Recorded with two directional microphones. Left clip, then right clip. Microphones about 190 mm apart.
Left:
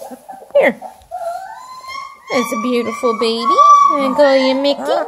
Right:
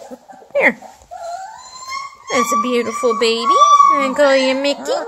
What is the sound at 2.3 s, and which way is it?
A woman's voice, 5° left (ahead or behind).